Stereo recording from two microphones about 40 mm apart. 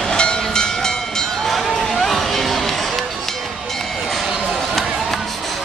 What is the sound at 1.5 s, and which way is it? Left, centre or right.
Music, centre.